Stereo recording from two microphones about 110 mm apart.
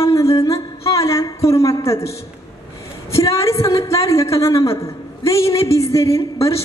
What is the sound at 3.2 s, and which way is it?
A woman's voice, 25° left (ahead or behind).